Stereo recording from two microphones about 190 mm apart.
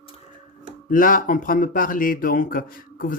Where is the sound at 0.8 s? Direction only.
45° left (ahead or behind).